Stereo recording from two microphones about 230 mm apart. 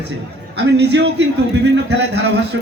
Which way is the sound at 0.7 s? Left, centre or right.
Right.